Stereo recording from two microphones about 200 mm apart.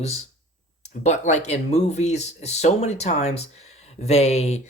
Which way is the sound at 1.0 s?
35° left (ahead or behind).